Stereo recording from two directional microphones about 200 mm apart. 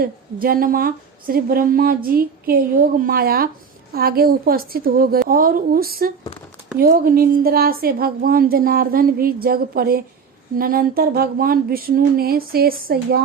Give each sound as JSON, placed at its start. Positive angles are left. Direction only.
{"t": 0.0, "sound": "a woman's voice", "side_deg": -45}